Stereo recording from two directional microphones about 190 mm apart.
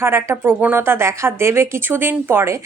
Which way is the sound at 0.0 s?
15° right (ahead or behind).